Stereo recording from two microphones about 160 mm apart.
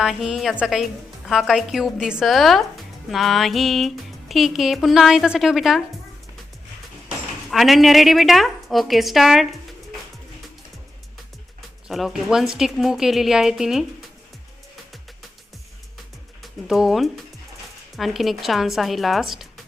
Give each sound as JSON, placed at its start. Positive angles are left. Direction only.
{"t": 0.0, "sound": "speech", "side_deg": -5}
{"t": 7.5, "sound": "speech", "side_deg": 0}
{"t": 11.9, "sound": "speech", "side_deg": 0}
{"t": 16.4, "sound": "speech", "side_deg": 0}